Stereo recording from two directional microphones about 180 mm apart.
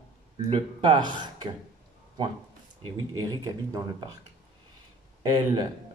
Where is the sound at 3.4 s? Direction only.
20° right (ahead or behind).